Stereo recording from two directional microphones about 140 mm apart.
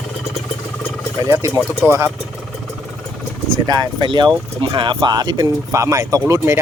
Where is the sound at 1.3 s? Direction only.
20° right (ahead or behind).